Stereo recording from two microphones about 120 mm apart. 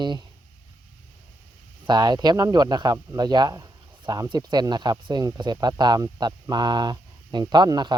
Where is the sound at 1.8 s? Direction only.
35° right (ahead or behind).